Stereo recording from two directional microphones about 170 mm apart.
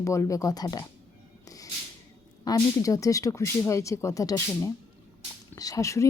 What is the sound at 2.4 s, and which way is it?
Speech, 20° left (ahead or behind).